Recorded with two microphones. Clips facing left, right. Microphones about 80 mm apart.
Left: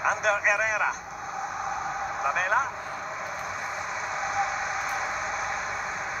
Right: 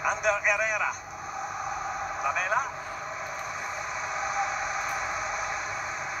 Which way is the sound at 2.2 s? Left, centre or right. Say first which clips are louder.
Left 2 dB; centre.